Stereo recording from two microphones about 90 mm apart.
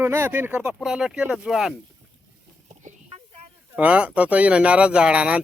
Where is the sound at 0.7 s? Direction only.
5° right (ahead or behind).